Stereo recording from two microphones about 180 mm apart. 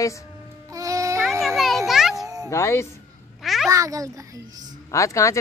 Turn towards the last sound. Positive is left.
turn(degrees=15)  # may be behind; listen again after turning